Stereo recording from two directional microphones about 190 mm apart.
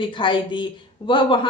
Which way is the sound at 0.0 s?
25° left (ahead or behind).